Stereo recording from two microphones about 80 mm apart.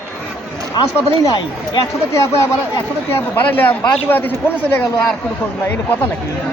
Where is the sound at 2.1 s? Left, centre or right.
Left.